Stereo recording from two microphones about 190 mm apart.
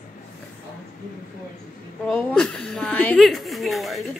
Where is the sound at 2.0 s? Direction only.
5° left (ahead or behind).